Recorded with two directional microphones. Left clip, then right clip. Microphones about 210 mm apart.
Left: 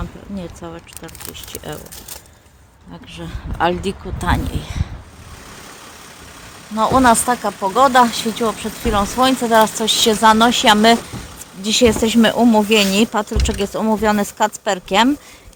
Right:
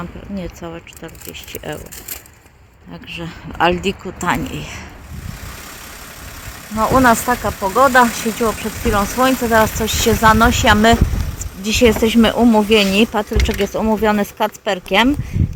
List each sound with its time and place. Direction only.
0.0 s speech: 5° right (ahead or behind)
3.1 s speech: 5° right (ahead or behind)
6.7 s speech: centre (ahead or behind)